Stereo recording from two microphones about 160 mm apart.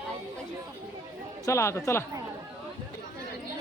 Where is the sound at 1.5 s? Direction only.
15° left (ahead or behind).